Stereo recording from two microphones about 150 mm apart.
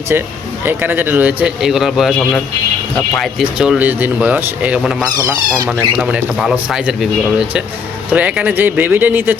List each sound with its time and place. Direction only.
0.6 s speech: 15° right (ahead or behind)
3.2 s speech: 5° right (ahead or behind)
5.1 s speech: 30° right (ahead or behind)
5.6 s speech: 5° right (ahead or behind)